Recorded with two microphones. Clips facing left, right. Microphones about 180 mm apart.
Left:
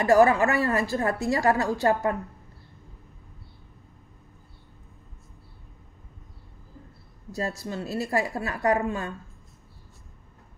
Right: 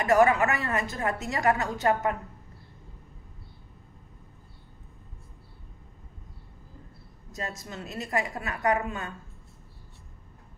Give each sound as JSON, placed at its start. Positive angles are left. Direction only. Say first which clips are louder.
{"t": 0.0, "sound": "a woman's voice", "louder": "left 3 dB", "side_deg": 35}
{"t": 7.2, "sound": "a woman's voice", "louder": "left 6 dB", "side_deg": 35}